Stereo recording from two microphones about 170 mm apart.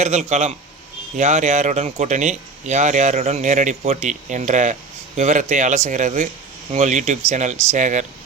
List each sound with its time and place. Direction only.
0.0 s a man's voice: 40° right (ahead or behind)